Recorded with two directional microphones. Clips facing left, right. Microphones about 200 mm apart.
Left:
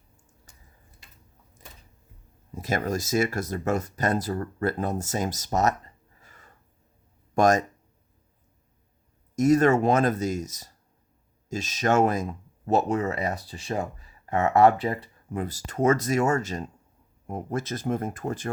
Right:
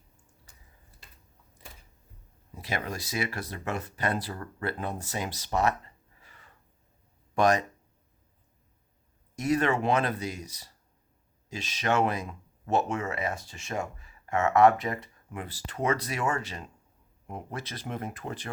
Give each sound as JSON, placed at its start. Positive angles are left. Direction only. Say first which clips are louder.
{"t": 2.6, "sound": "speech", "louder": "left 7 dB", "side_deg": 45}
{"t": 9.3, "sound": "speech", "louder": "left 7 dB", "side_deg": 45}